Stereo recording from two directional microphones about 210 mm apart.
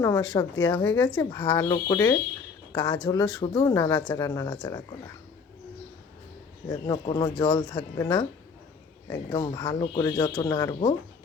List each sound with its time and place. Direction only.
0.0 s speech: 15° left (ahead or behind)
0.9 s speech: 10° left (ahead or behind)
1.2 s speech: 20° left (ahead or behind)
6.8 s speech: 20° left (ahead or behind)